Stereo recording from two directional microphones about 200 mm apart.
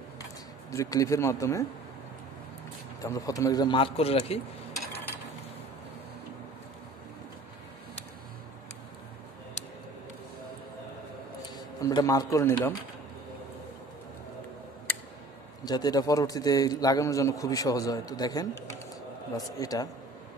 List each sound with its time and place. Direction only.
0.2 s speech: 15° left (ahead or behind)
3.0 s a man's voice: 15° left (ahead or behind)
11.8 s a man's voice: 15° left (ahead or behind)
15.6 s a man's voice: 20° left (ahead or behind)